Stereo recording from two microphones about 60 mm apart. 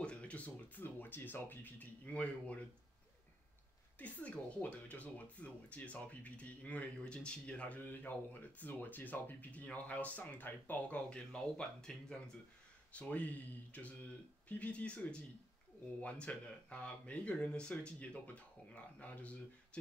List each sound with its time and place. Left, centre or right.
0.0 s music: centre
2.0 s speech: left
4.0 s speech: left
11.1 s speech: centre
13.1 s speech: left